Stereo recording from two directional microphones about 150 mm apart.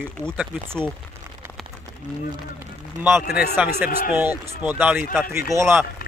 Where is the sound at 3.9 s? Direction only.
70° left (ahead or behind).